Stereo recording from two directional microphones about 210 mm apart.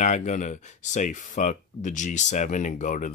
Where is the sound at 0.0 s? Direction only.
35° left (ahead or behind).